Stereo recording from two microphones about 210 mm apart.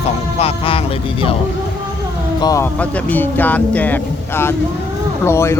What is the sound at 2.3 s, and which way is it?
Speech, 15° left (ahead or behind).